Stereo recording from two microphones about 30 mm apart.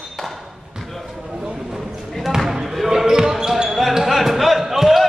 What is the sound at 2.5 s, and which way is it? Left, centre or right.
Basketball bounce, centre.